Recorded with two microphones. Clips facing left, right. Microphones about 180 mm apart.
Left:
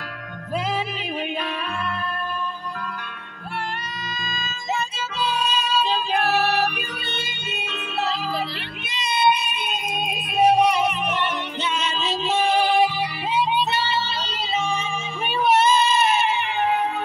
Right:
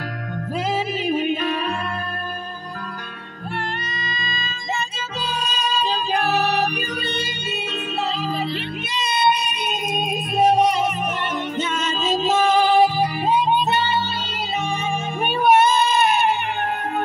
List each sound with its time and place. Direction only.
1.0 s music: 45° right (ahead or behind)
3.6 s music: 10° left (ahead or behind)
5.2 s music: 40° right (ahead or behind)
10.6 s music: 45° right (ahead or behind)